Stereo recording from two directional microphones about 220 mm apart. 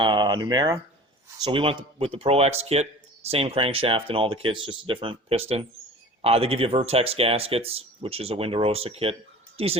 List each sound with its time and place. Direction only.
0.0 s speech: 20° right (ahead or behind)